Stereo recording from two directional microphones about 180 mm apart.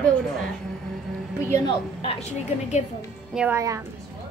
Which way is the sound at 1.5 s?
25° left (ahead or behind).